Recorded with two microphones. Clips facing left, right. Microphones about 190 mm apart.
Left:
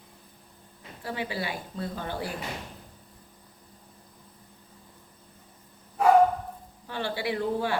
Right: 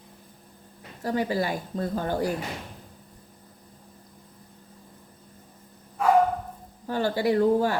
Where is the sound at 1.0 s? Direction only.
45° right (ahead or behind).